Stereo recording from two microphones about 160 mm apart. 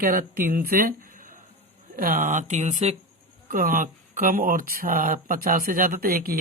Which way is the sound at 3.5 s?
55° right (ahead or behind).